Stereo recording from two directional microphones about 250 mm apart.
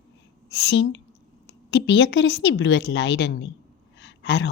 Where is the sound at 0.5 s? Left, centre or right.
Left.